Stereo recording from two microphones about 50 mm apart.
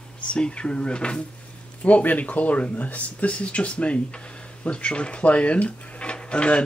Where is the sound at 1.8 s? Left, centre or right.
Left.